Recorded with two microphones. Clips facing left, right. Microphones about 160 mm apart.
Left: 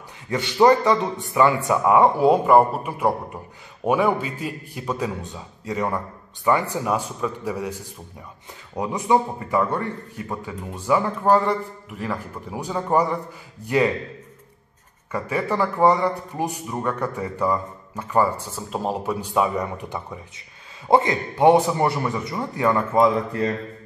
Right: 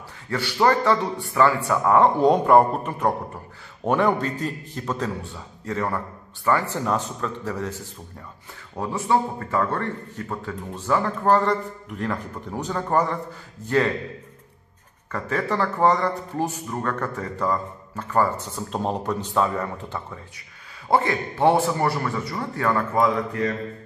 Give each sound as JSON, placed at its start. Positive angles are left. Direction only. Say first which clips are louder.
{"t": 0.3, "sound": "a man's voice", "louder": "left 4 dB", "side_deg": 20}
{"t": 15.0, "sound": "a man's voice", "louder": "left 1 dB", "side_deg": 10}